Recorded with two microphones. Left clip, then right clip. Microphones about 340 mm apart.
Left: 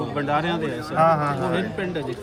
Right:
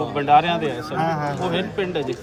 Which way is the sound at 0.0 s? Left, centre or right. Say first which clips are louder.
Right 7 dB; centre.